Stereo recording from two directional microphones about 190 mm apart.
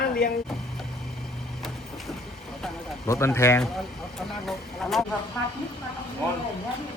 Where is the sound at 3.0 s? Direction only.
15° left (ahead or behind).